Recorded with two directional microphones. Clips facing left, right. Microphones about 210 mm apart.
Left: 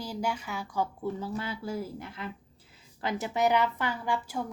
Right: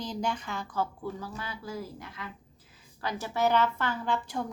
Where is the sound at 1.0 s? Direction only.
25° left (ahead or behind).